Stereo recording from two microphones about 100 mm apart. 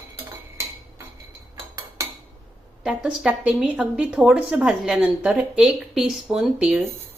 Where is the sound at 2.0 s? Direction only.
30° right (ahead or behind).